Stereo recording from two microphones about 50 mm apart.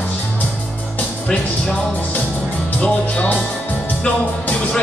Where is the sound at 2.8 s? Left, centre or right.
Left.